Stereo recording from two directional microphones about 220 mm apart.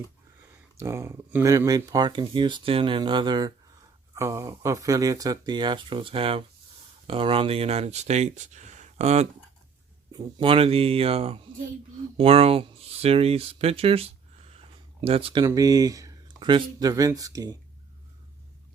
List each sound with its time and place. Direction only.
0.8 s speech: 10° right (ahead or behind); by 9.2 s 30° right (ahead or behind)
10.1 s speech: 20° right (ahead or behind)